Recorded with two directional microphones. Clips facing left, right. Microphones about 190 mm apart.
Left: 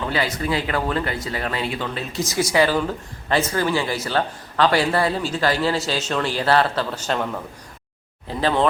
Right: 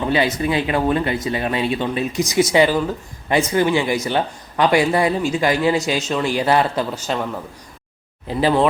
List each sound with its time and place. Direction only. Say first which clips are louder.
0.1 s speech: right 5 dB; 20° right (ahead or behind)
8.3 s speech: right 4 dB; 10° right (ahead or behind)